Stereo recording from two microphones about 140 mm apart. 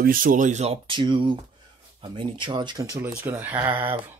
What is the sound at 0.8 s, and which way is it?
Speech, 35° right (ahead or behind).